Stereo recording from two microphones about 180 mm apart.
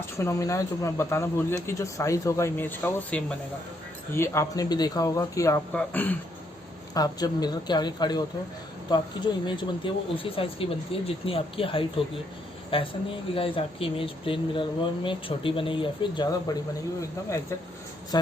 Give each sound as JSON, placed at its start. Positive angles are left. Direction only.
{"t": 0.2, "sound": "speech", "side_deg": 15}
{"t": 6.9, "sound": "speech", "side_deg": 20}